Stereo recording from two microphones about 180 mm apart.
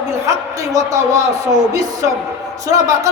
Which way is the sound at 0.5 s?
20° right (ahead or behind).